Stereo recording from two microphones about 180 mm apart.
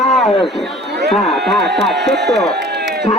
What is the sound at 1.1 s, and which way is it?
Speech, centre (ahead or behind).